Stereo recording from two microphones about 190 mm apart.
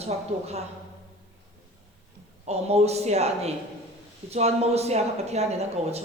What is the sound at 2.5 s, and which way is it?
Speech, 35° right (ahead or behind).